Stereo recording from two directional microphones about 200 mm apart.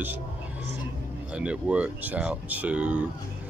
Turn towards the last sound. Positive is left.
turn(degrees=-5)  # may be behind; listen again after turning